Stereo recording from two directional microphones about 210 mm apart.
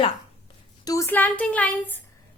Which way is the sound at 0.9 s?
15° left (ahead or behind).